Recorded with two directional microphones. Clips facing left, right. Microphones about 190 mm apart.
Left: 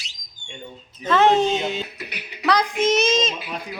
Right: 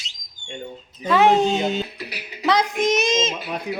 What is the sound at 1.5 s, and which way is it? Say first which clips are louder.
Speech: right 2 dB; 40° right (ahead or behind).